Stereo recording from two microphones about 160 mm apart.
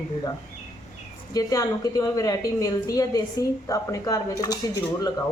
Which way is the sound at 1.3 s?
20° left (ahead or behind).